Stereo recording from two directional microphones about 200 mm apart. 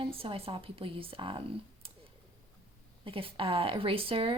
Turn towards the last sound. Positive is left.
turn(degrees=-25)  # may be behind; listen again after turning